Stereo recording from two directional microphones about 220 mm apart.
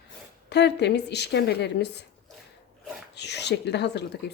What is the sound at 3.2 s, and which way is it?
Speech, 50° left (ahead or behind).